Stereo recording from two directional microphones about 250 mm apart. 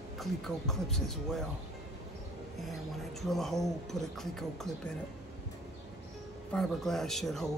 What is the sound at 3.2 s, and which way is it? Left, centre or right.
Speech, centre.